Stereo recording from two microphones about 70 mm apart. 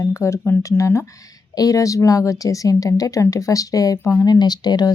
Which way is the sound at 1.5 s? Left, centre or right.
Left.